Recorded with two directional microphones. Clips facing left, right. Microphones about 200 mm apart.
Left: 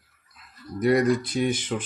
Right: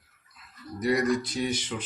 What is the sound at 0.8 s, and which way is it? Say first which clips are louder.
Speech: left 4 dB; 55° left (ahead or behind).